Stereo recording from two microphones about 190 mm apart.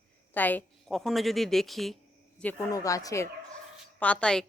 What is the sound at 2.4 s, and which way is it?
Speech, 15° left (ahead or behind).